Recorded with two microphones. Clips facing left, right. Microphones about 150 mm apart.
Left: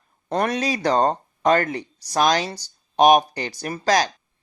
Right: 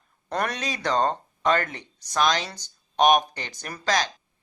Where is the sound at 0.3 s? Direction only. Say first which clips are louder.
Left 6 dB; 35° left (ahead or behind).